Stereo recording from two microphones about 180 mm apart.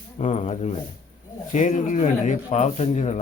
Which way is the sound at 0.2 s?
40° left (ahead or behind).